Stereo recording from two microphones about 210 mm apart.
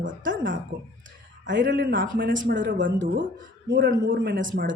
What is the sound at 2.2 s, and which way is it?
Speech, 60° right (ahead or behind).